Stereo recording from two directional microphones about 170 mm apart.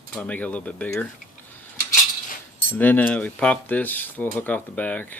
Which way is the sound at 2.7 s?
10° left (ahead or behind).